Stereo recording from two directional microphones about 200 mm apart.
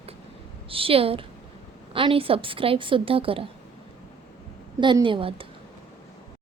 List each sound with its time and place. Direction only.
0.7 s a woman's voice: 25° right (ahead or behind)
4.8 s a woman's voice: 25° right (ahead or behind)